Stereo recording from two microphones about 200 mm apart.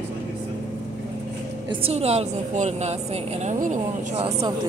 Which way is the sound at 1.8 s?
30° right (ahead or behind).